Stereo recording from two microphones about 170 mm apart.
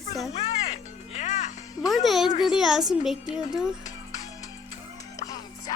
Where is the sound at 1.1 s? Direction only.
45° left (ahead or behind).